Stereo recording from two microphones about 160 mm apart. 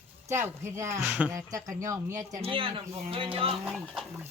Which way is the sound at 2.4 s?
35° right (ahead or behind).